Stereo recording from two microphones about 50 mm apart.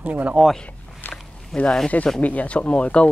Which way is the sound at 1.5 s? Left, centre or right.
Centre.